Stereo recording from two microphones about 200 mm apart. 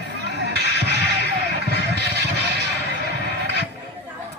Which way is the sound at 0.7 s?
60° left (ahead or behind).